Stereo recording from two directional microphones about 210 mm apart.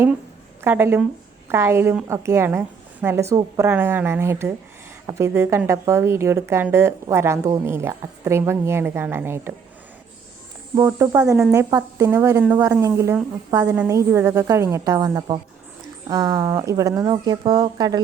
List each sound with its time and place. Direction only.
0.6 s a woman's voice: 10° right (ahead or behind)
10.8 s a woman's voice: 15° right (ahead or behind)